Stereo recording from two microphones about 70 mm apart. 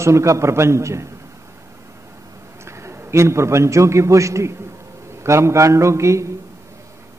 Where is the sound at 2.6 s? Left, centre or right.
Right.